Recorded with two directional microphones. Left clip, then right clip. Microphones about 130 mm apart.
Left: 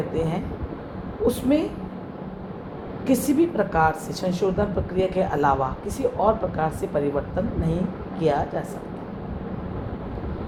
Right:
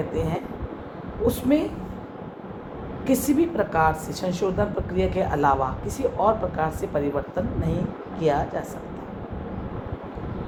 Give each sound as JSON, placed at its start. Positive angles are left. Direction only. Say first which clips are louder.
{"t": 0.1, "sound": "a woman's voice", "louder": "left 1 dB", "side_deg": -55}
{"t": 3.1, "sound": "a woman's voice", "louder": "left 1 dB", "side_deg": -50}